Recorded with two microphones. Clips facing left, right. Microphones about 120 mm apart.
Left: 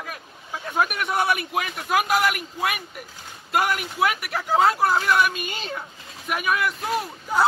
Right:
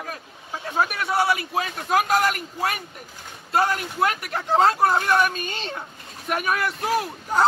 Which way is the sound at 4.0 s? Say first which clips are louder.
Even; 35° right (ahead or behind).